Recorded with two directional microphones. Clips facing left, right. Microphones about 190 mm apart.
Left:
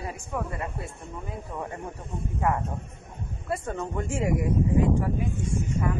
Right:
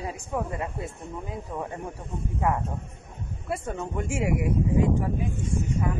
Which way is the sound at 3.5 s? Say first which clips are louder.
Left 1 dB; 10° right (ahead or behind).